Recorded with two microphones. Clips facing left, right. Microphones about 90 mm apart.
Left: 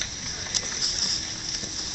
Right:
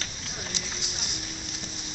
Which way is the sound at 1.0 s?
65° left (ahead or behind).